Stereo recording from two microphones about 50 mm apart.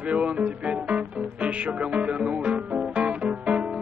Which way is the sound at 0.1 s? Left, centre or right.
Right.